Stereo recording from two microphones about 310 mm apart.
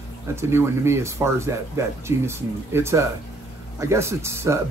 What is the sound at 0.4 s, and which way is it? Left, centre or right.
Speech, centre.